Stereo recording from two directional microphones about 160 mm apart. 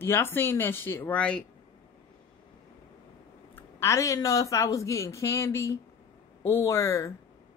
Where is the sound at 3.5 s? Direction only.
15° left (ahead or behind).